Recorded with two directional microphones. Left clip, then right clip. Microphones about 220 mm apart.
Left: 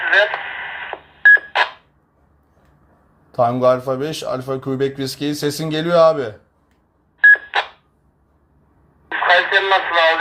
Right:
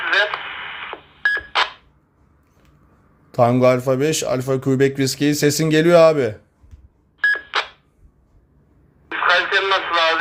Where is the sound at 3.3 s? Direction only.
40° right (ahead or behind).